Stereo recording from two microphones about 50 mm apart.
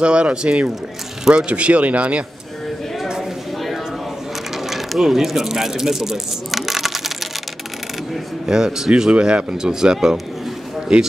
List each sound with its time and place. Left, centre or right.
0.0 s speech: right
4.6 s speech: centre
8.5 s speech: centre
9.9 s speech: centre